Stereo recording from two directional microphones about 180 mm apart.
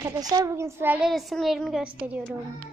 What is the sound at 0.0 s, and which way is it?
A child's voice, 20° right (ahead or behind).